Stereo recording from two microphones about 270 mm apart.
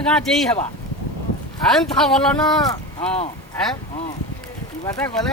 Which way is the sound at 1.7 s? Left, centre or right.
Centre.